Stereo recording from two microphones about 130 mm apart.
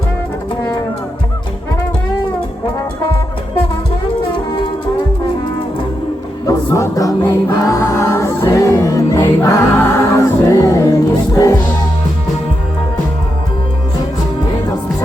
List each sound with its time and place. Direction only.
6.7 s music: 20° left (ahead or behind)